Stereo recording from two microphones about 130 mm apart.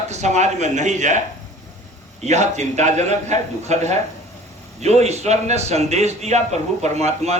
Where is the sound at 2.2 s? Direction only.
60° right (ahead or behind).